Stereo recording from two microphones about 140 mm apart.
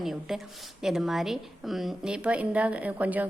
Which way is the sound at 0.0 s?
Centre (ahead or behind).